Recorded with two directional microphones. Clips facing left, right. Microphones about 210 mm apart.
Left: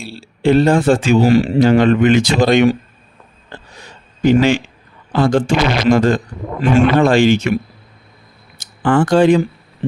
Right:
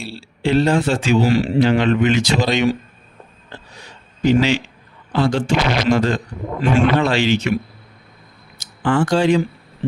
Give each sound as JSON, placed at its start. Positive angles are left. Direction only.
{"t": 0.2, "sound": "speech", "side_deg": 50}
{"t": 3.8, "sound": "a sound", "side_deg": 50}
{"t": 5.1, "sound": "speech", "side_deg": 50}
{"t": 8.5, "sound": "speech", "side_deg": 50}